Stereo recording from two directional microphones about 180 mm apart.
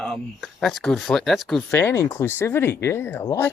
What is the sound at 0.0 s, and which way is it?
Speech, centre (ahead or behind).